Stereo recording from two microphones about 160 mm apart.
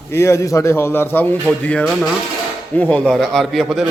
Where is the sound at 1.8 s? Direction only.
Centre (ahead or behind).